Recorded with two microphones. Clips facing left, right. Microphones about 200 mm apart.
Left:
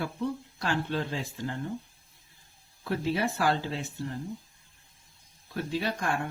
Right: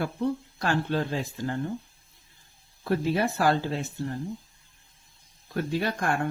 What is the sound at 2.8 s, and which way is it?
Speech, 45° right (ahead or behind).